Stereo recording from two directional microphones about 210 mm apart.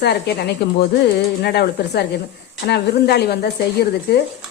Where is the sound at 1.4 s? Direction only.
50° left (ahead or behind).